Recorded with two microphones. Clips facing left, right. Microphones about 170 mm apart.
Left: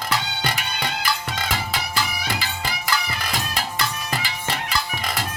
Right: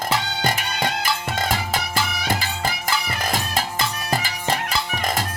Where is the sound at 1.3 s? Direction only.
50° right (ahead or behind).